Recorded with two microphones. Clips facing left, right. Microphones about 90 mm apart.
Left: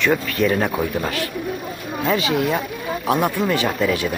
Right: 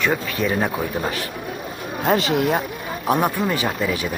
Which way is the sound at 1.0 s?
20° right (ahead or behind).